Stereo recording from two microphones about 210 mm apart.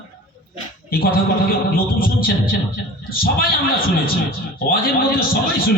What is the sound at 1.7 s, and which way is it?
Speech, 45° left (ahead or behind).